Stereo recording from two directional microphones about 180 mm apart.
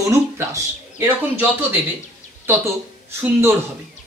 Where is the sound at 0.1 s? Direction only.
15° right (ahead or behind).